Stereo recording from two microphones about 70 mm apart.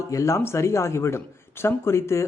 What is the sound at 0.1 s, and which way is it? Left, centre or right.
A man's voice, left.